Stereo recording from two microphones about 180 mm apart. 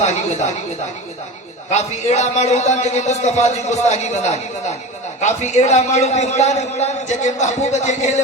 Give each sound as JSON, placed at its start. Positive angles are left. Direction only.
{"t": 0.0, "sound": "a man's voice", "side_deg": 40}
{"t": 1.7, "sound": "a man's voice", "side_deg": 40}